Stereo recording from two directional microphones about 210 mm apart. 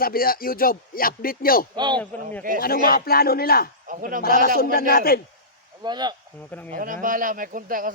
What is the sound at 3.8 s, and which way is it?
Speech, 40° right (ahead or behind).